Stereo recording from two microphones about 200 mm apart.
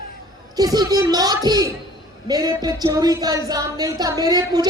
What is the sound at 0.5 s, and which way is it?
A woman's voice, 20° right (ahead or behind).